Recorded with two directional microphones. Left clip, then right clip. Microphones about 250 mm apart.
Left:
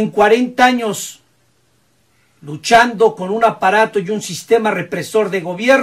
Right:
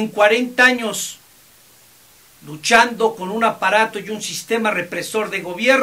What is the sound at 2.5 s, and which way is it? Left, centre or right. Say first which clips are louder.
Speech: left 3 dB; centre.